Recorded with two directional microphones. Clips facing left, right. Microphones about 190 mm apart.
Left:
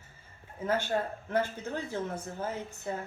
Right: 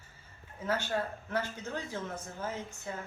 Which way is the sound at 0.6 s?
50° left (ahead or behind).